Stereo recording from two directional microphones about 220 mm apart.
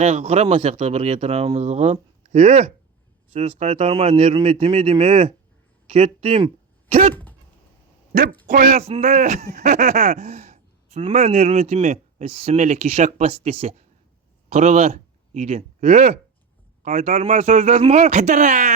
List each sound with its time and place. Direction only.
0.0 s speech: 30° right (ahead or behind)
7.1 s dog: 10° left (ahead or behind)
8.1 s speech: 35° right (ahead or behind)